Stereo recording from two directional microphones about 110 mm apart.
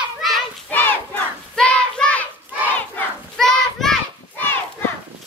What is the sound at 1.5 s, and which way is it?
Child singing, 10° left (ahead or behind).